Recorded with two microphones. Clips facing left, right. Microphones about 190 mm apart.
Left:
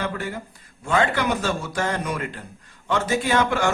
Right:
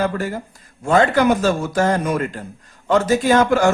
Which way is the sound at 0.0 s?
40° right (ahead or behind).